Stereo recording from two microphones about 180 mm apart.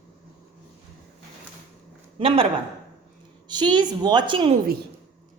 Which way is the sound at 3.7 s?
25° right (ahead or behind).